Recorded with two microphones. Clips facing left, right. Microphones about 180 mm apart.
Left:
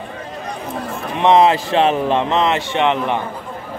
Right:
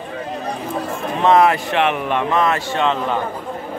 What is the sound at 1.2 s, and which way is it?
A man's voice, 20° left (ahead or behind).